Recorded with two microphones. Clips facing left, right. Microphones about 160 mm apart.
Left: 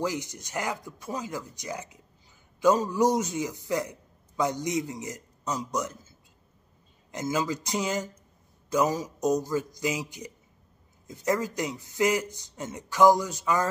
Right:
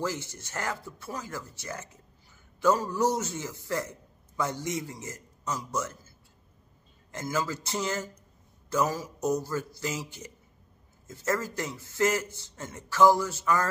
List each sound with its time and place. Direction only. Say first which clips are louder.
0.0 s a man's voice: left 2 dB; 15° left (ahead or behind)